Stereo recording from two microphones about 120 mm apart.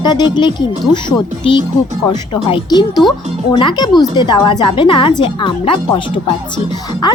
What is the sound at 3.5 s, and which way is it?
A woman's voice, 40° left (ahead or behind).